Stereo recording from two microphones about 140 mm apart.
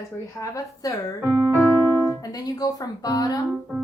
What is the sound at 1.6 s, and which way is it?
Speech, 15° left (ahead or behind).